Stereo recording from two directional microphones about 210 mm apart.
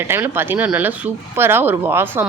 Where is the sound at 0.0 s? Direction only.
10° right (ahead or behind).